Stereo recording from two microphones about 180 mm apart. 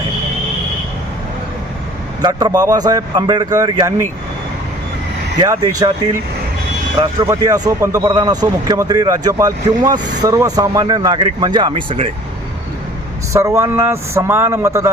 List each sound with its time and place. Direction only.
2.2 s speech: 20° right (ahead or behind)
5.4 s speech: 20° right (ahead or behind)
7.2 s speech: 20° right (ahead or behind)
13.3 s a man's voice: 15° right (ahead or behind)